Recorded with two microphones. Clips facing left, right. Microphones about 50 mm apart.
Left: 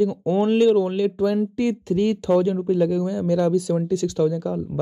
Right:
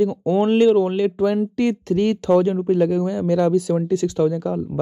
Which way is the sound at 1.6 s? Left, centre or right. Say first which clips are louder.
Right 3 dB; right.